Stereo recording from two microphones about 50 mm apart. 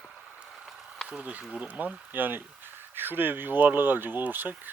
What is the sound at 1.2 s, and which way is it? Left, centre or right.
Speech, right.